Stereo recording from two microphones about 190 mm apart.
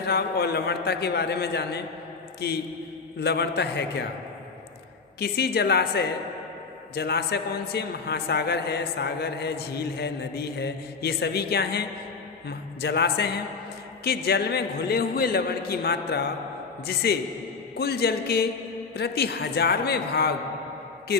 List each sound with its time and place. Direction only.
0.0 s a man's voice: 55° left (ahead or behind)
5.2 s a man's voice: 60° left (ahead or behind)